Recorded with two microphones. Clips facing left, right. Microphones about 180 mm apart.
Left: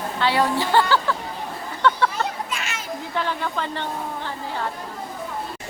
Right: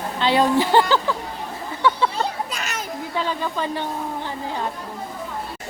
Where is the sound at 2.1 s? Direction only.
35° right (ahead or behind).